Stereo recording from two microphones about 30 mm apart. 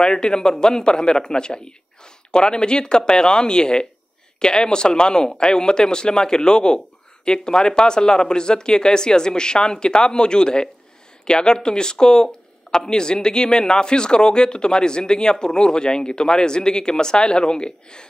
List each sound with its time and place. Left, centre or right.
0.0 s speech: left